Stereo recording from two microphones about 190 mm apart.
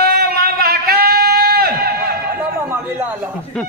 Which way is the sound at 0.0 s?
55° right (ahead or behind).